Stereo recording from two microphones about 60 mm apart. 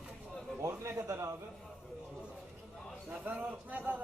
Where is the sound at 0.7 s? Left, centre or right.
Right.